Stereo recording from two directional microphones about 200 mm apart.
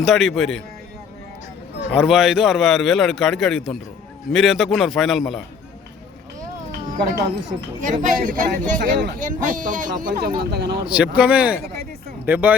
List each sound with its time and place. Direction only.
0.0 s a man's voice: centre (ahead or behind)
1.9 s a man's voice: centre (ahead or behind)
6.9 s speech: 40° right (ahead or behind)
8.8 s speech: 55° right (ahead or behind)
9.2 s speech: 40° right (ahead or behind)
10.8 s speech: 5° right (ahead or behind)